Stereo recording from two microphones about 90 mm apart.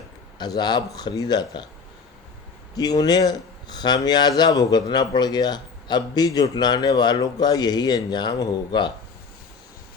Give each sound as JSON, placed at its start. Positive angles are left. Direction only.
{"t": 0.3, "sound": "speech", "side_deg": 50}
{"t": 2.7, "sound": "speech", "side_deg": 45}